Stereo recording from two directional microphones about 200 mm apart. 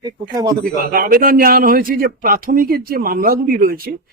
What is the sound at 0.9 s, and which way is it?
A man's voice, 45° right (ahead or behind).